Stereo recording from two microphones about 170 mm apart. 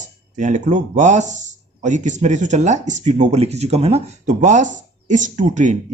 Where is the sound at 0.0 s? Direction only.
45° right (ahead or behind).